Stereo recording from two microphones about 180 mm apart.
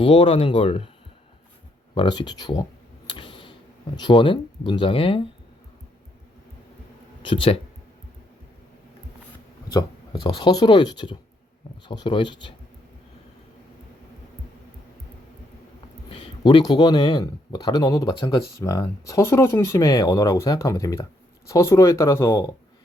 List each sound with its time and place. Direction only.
0.0 s speech: 30° left (ahead or behind)
2.0 s speech: 25° left (ahead or behind)
3.1 s tick-tock: 25° left (ahead or behind)
3.9 s speech: 25° left (ahead or behind)
7.2 s speech: 30° left (ahead or behind)
9.7 s speech: 25° left (ahead or behind)
16.0 s speech: 25° left (ahead or behind)